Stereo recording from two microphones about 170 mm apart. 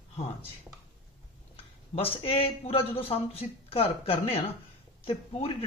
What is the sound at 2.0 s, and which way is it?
Speech, 35° left (ahead or behind).